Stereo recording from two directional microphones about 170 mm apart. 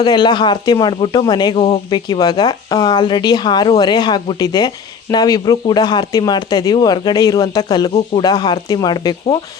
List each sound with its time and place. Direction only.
0.0 s speech: 25° left (ahead or behind)